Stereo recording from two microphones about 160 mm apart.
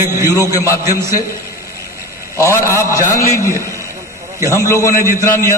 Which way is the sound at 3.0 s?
20° left (ahead or behind).